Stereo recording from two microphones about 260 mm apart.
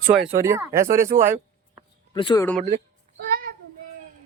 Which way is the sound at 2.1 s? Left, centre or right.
Centre.